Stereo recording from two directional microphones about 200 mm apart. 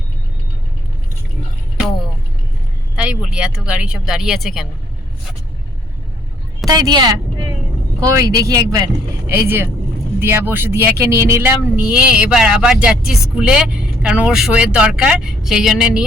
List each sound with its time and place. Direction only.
2.9 s speech: 5° right (ahead or behind)
6.7 s speech: 20° right (ahead or behind)
8.2 s speech: 15° right (ahead or behind)